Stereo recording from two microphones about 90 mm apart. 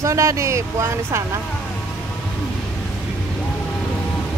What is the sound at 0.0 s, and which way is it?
Speech, 35° right (ahead or behind).